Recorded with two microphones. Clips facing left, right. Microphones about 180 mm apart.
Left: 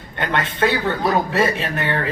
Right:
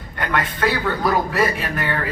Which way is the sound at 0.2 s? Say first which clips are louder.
Left 2 dB; 25° left (ahead or behind).